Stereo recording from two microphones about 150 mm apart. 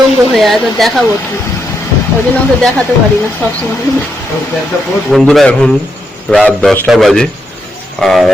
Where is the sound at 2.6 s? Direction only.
5° left (ahead or behind).